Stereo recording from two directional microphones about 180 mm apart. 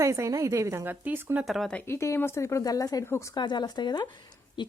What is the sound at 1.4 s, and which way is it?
Speech, centre (ahead or behind).